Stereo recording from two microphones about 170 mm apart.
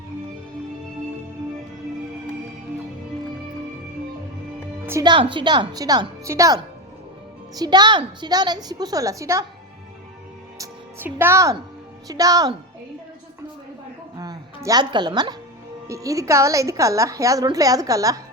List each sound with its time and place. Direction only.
4.9 s a woman's voice: 15° right (ahead or behind)
5.1 s a woman's voice: 30° right (ahead or behind)
10.6 s music: 15° right (ahead or behind)
12.0 s a woman's voice: 20° right (ahead or behind)
14.2 s music: 20° right (ahead or behind)
15.9 s a woman's voice: 20° right (ahead or behind)